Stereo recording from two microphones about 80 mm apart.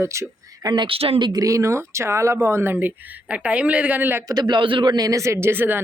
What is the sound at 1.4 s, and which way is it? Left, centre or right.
Speech, right.